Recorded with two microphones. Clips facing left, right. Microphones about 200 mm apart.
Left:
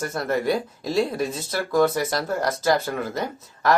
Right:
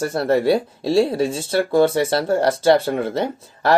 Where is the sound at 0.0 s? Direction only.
30° right (ahead or behind).